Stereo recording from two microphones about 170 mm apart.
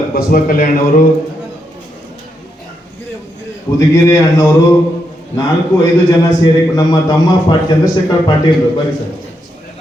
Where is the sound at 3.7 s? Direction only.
20° left (ahead or behind).